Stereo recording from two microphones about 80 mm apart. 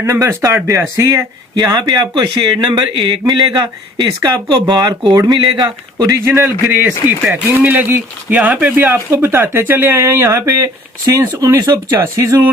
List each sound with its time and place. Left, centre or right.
0.0 s speech: right
1.5 s speech: right
2.6 s speech: right
6.1 s speech: right
8.4 s speech: centre
8.7 s speech: right
10.4 s speech: right